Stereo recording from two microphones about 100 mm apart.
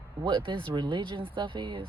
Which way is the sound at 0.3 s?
55° right (ahead or behind).